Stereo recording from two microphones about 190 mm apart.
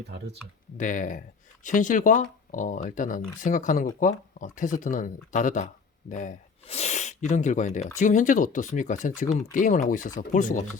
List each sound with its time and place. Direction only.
0.8 s speech: 45° left (ahead or behind)